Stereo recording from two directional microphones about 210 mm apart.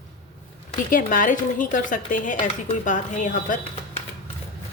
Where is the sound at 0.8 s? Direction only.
40° left (ahead or behind).